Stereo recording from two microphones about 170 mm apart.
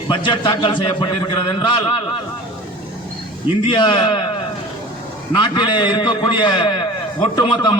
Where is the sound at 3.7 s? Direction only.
25° left (ahead or behind).